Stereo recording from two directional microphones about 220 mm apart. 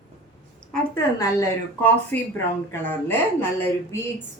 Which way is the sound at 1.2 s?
10° left (ahead or behind).